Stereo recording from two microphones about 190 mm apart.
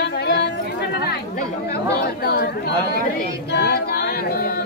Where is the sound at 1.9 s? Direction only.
55° left (ahead or behind).